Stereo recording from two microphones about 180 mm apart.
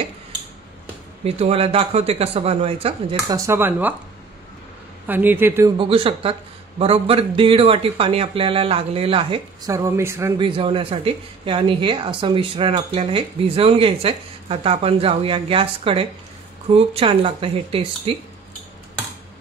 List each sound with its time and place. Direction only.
1.2 s speech: 35° right (ahead or behind)
3.3 s speech: 15° right (ahead or behind)
5.0 s speech: 10° right (ahead or behind)
5.8 s speech: 30° right (ahead or behind)
9.7 s speech: 15° right (ahead or behind)
10.4 s speech: 30° right (ahead or behind)